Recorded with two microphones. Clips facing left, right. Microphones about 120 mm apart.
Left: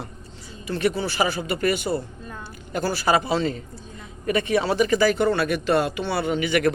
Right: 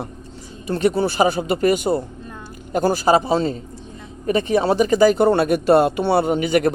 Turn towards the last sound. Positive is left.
turn(degrees=-45)  # may be behind; listen again after turning